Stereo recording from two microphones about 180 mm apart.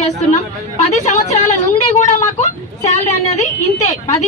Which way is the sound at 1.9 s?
40° left (ahead or behind).